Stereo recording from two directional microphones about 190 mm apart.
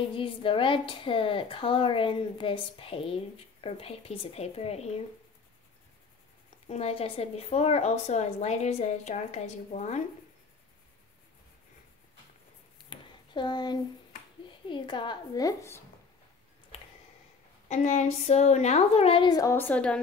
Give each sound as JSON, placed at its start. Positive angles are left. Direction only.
{"t": 0.1, "sound": "speech", "side_deg": 25}
{"t": 6.7, "sound": "speech", "side_deg": 35}
{"t": 12.7, "sound": "a sound", "side_deg": 25}
{"t": 14.7, "sound": "speech", "side_deg": 25}
{"t": 17.6, "sound": "speech", "side_deg": 40}